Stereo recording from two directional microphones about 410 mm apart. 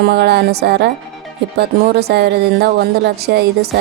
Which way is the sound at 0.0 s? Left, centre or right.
Right.